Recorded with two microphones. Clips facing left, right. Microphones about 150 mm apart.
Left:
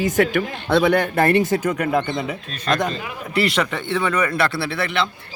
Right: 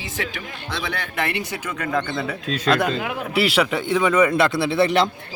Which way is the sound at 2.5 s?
90° right.